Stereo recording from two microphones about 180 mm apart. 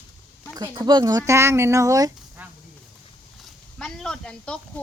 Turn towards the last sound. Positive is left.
turn(degrees=5)  # may be behind; listen again after turning